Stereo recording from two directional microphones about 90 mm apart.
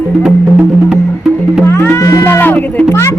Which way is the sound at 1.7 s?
30° left (ahead or behind).